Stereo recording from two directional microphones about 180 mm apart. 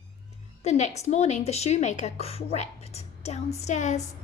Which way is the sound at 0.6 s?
40° left (ahead or behind).